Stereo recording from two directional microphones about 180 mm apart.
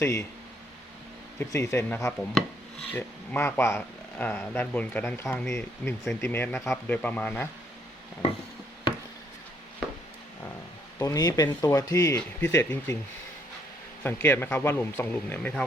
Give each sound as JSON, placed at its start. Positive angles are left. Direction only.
{"t": 0.0, "sound": "speech", "side_deg": 15}
{"t": 1.4, "sound": "speech", "side_deg": 15}
{"t": 10.9, "sound": "speech", "side_deg": 20}
{"t": 14.0, "sound": "speech", "side_deg": 10}